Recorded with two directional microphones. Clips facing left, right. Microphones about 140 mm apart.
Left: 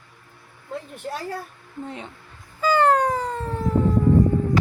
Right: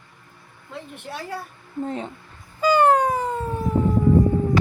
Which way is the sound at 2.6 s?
15° right (ahead or behind).